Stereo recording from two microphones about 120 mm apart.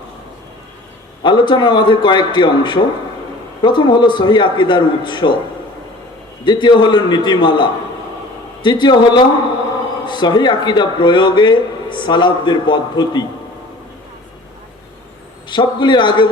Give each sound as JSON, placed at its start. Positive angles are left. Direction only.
{"t": 1.2, "sound": "a man's voice", "side_deg": 40}
{"t": 6.4, "sound": "a man's voice", "side_deg": 40}
{"t": 15.4, "sound": "a man's voice", "side_deg": 40}